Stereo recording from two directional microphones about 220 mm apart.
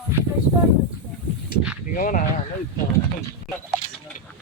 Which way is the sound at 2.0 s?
35° left (ahead or behind).